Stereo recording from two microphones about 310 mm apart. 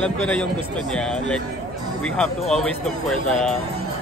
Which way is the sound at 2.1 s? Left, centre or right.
Centre.